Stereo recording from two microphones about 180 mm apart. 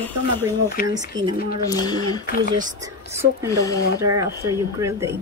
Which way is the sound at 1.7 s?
20° left (ahead or behind).